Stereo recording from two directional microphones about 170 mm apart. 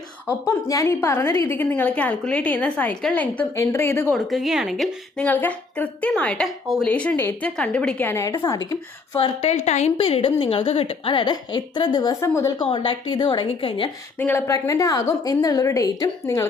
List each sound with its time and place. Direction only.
0.3 s a woman's voice: 20° left (ahead or behind)
4.1 s a woman's voice: centre (ahead or behind); by 12.6 s 20° left (ahead or behind)
12.6 s a woman's voice: 30° left (ahead or behind)
14.2 s a woman's voice: 15° left (ahead or behind)